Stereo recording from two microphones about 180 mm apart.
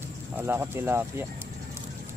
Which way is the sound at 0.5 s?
15° right (ahead or behind).